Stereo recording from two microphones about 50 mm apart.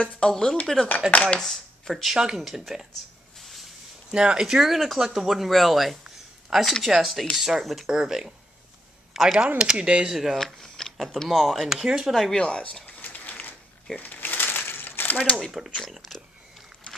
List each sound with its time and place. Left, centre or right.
0.0 s speech: centre
1.1 s speech: left
1.4 s speech: centre
2.1 s speech: centre
3.3 s a sound: centre
4.1 s speech: centre
9.6 s speech: centre
10.3 s a sound: centre
11.2 s speech: centre
12.1 s speech: centre
12.8 s a sound: left
13.9 s crumpling: left